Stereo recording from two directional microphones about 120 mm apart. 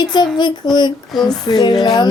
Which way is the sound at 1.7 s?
Centre (ahead or behind).